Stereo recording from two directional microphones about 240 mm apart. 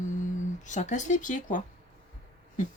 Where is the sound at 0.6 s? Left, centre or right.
Left.